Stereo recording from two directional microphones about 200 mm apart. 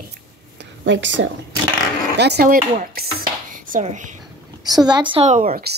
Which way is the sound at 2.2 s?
55° right (ahead or behind).